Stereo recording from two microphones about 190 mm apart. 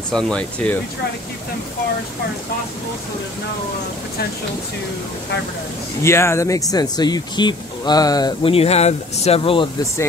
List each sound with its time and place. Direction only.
0.1 s speech: 5° left (ahead or behind)
6.0 s speech: 15° left (ahead or behind)